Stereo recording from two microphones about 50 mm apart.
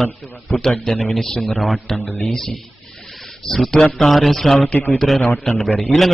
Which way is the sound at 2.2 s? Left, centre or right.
Centre.